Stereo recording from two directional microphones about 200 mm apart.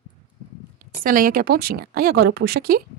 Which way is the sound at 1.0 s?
45° right (ahead or behind).